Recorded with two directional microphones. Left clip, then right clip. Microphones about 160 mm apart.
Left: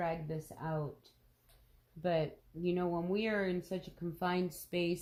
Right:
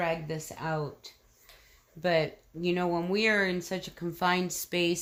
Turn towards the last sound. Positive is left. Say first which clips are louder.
# right 7 dB
turn(degrees=-20)  # may be behind; listen again after turning